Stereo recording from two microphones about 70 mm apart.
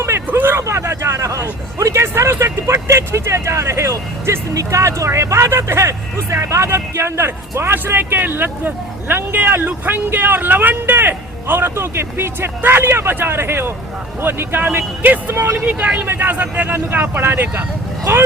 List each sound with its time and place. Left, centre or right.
0.3 s speech: right
0.5 s speech: right